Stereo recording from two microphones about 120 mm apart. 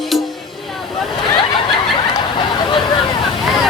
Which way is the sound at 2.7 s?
40° left (ahead or behind).